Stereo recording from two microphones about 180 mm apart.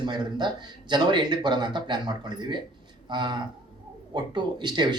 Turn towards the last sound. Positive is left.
turn(degrees=-25)  # may be behind; listen again after turning